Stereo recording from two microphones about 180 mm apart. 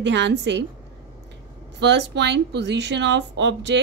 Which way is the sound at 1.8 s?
75° right (ahead or behind).